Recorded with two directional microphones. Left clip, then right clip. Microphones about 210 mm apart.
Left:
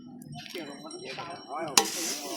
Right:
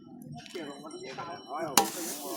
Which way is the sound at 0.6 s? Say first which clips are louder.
Even; 40° left (ahead or behind).